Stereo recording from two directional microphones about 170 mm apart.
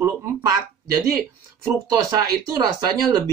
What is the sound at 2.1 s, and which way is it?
Speech, 25° right (ahead or behind).